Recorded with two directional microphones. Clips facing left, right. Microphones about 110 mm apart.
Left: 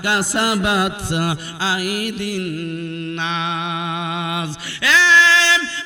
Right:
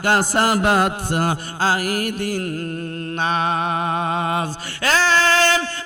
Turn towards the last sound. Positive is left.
turn(degrees=-45)  # may be behind; listen again after turning